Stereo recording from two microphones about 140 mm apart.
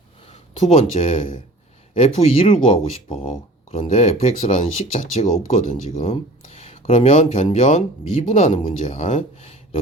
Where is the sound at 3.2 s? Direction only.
60° left (ahead or behind).